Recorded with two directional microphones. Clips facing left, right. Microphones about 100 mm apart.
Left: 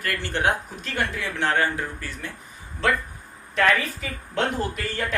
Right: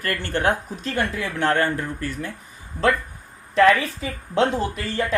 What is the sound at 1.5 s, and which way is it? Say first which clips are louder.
Speech: right 2 dB; 55° right (ahead or behind).